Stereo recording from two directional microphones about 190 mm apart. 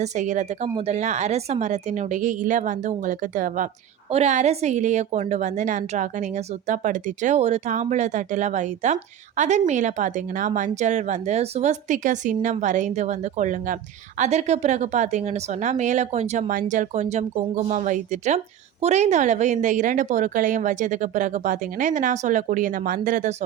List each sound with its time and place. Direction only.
0.0 s a woman's voice: 40° right (ahead or behind)